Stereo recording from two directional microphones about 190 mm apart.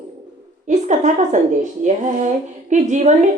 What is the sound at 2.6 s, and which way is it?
Speech, 40° right (ahead or behind).